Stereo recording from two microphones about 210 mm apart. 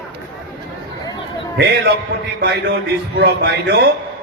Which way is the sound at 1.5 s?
55° right (ahead or behind).